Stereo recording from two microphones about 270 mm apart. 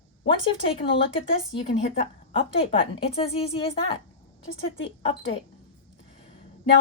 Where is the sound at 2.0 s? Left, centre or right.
Centre.